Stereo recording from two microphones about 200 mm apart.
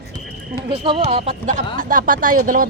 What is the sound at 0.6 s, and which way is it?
Speech, 25° right (ahead or behind).